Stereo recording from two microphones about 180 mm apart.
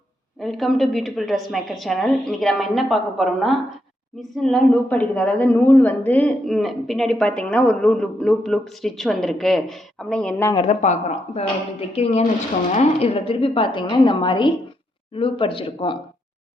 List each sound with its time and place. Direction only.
0.3 s a woman's voice: centre (ahead or behind)
10.7 s speech: 40° left (ahead or behind)
11.9 s a woman's voice: 35° left (ahead or behind)